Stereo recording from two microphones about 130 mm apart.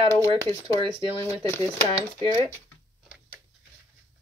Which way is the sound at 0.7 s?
35° right (ahead or behind).